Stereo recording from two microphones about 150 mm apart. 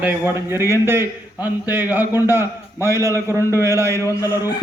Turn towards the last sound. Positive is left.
turn(degrees=20)  # may be behind; listen again after turning